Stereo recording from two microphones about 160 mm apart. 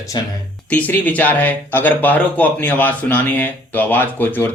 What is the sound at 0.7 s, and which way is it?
Speech, 10° left (ahead or behind).